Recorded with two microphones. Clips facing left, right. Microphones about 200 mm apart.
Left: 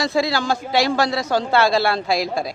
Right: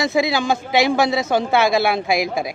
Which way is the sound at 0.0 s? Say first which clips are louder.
Right 2 dB; 20° right (ahead or behind).